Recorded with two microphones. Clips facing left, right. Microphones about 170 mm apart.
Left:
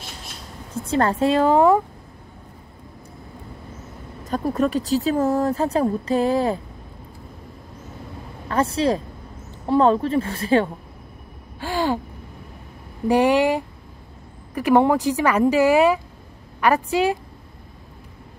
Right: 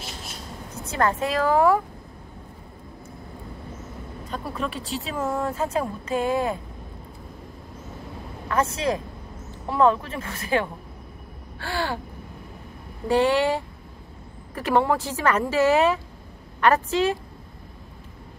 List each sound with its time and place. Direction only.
0.8 s a woman's voice: 30° left (ahead or behind)
4.3 s speech: 45° left (ahead or behind)
8.5 s speech: 30° left (ahead or behind)
11.6 s a woman's voice: 15° left (ahead or behind)
13.1 s a woman's voice: 15° left (ahead or behind)